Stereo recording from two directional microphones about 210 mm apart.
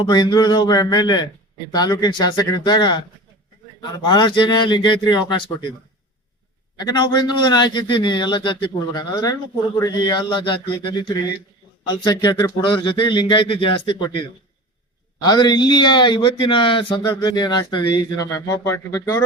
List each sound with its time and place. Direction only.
0.0 s a man's voice: 20° left (ahead or behind)
6.7 s a man's voice: 20° left (ahead or behind)